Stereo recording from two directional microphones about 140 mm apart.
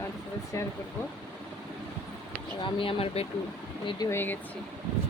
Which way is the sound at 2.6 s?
40° left (ahead or behind).